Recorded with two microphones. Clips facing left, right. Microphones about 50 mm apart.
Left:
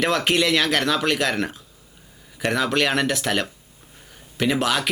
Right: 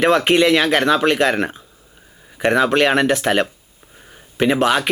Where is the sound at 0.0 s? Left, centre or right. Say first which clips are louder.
Right 6 dB; right.